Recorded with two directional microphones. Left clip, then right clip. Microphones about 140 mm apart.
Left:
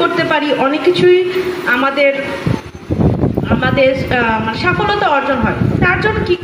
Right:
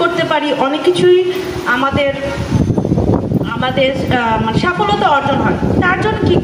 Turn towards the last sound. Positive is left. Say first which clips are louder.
# even
turn(degrees=20)  # may be behind; listen again after turning